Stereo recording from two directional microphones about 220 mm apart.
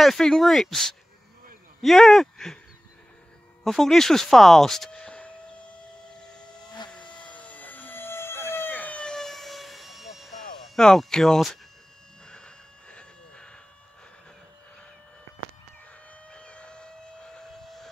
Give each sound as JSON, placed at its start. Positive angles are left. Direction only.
{"t": 0.0, "sound": "speech", "side_deg": 0}
{"t": 3.6, "sound": "speech", "side_deg": 0}
{"t": 7.0, "sound": "a sound", "side_deg": 20}
{"t": 7.3, "sound": "vehicle", "side_deg": 5}
{"t": 10.6, "sound": "speech", "side_deg": 0}
{"t": 12.3, "sound": "a sound", "side_deg": 5}
{"t": 16.3, "sound": "vehicle", "side_deg": 5}